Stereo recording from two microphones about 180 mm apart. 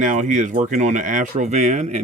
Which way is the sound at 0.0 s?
45° right (ahead or behind).